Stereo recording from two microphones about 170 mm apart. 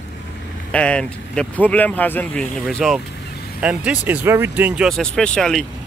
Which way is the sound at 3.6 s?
10° right (ahead or behind).